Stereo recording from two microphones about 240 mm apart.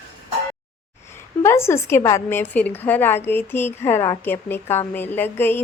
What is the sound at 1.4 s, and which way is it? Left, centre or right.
A woman's voice, centre.